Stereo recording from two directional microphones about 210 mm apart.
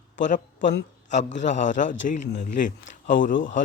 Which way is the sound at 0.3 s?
35° left (ahead or behind).